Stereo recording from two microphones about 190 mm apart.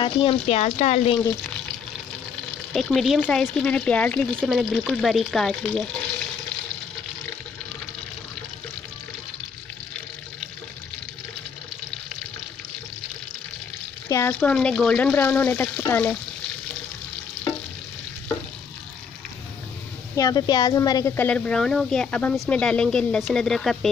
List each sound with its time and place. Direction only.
0.0 s speech: 30° left (ahead or behind)
2.7 s speech: centre (ahead or behind)
14.0 s a sound: 15° left (ahead or behind)
14.3 s speech: 5° left (ahead or behind)
20.2 s speech: 20° left (ahead or behind); by 23.9 s centre (ahead or behind)